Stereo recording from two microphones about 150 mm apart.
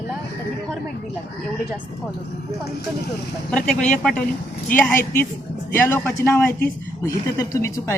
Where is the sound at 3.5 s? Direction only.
5° left (ahead or behind).